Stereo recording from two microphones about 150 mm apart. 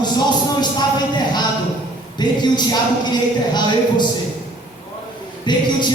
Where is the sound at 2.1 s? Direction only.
30° left (ahead or behind).